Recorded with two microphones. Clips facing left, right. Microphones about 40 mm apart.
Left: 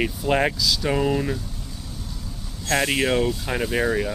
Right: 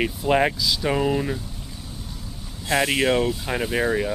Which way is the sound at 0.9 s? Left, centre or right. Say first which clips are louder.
Right 1 dB; centre.